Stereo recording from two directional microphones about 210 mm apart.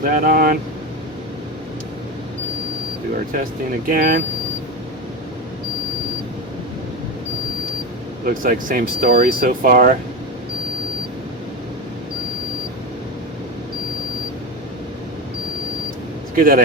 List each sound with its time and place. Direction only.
0.1 s speech: 45° right (ahead or behind)
3.3 s speech: 40° right (ahead or behind)
8.2 s speech: 40° right (ahead or behind)
16.3 s speech: 45° right (ahead or behind)